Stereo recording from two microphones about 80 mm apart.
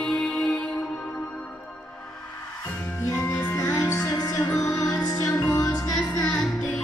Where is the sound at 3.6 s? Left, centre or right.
Left.